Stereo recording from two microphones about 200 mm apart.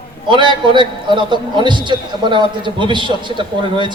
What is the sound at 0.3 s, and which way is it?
A man's voice, 25° right (ahead or behind).